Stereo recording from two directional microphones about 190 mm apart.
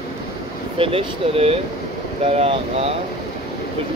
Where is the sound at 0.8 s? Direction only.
30° right (ahead or behind).